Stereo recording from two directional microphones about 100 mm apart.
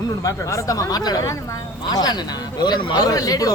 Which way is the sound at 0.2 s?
35° left (ahead or behind).